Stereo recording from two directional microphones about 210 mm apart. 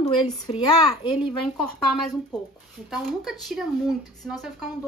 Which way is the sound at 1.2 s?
Centre (ahead or behind).